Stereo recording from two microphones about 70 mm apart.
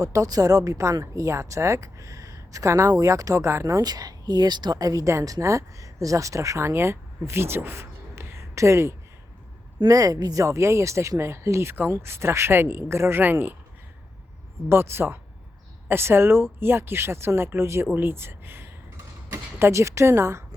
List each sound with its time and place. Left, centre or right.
0.0 s speech: right
3.8 s speech: right
9.8 s speech: right
14.7 s a woman's voice: right